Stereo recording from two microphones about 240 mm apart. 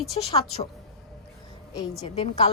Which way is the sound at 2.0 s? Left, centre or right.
Left.